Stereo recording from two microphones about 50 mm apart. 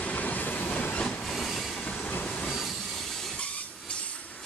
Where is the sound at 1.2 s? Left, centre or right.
Centre.